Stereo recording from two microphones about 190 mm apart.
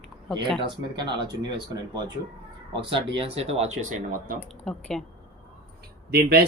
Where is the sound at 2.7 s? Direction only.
25° right (ahead or behind); by 4.4 s 45° right (ahead or behind).